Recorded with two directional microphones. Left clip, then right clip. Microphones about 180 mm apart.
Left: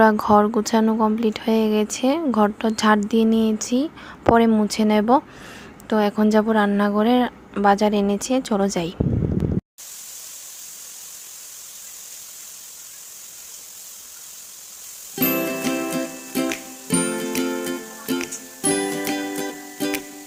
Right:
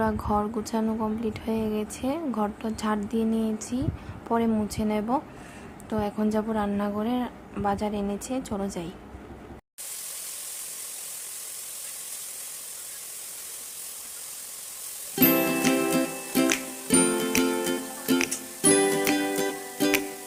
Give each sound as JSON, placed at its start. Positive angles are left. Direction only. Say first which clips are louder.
{"t": 0.0, "sound": "a woman's voice", "louder": "left 11 dB", "side_deg": 40}
{"t": 15.1, "sound": "music", "louder": "even", "side_deg": 0}